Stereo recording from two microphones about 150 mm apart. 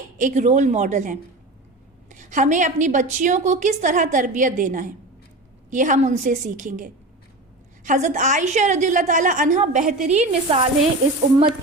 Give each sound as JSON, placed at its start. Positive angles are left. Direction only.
{"t": 0.2, "sound": "a woman's voice", "side_deg": -55}